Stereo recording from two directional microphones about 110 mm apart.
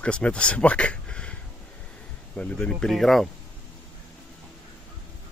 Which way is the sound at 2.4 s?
10° left (ahead or behind).